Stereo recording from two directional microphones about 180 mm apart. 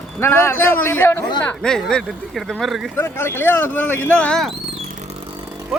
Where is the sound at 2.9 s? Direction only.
15° left (ahead or behind).